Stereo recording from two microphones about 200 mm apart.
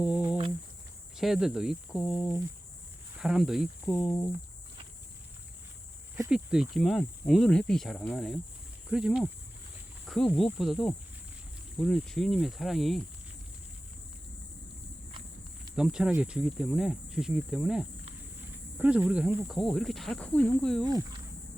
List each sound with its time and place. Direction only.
1.1 s speech: centre (ahead or behind)
3.8 s speech: 15° left (ahead or behind)
6.3 s speech: 5° right (ahead or behind)
15.7 s speech: 5° right (ahead or behind)